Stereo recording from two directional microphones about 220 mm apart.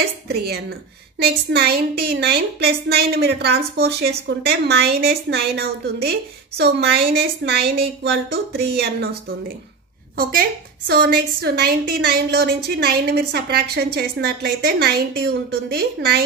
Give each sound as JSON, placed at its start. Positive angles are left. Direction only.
{"t": 0.3, "sound": "a woman's voice", "side_deg": -45}
{"t": 10.9, "sound": "a woman's voice", "side_deg": -50}